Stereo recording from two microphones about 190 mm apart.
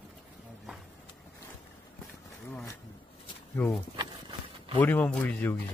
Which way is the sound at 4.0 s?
25° right (ahead or behind).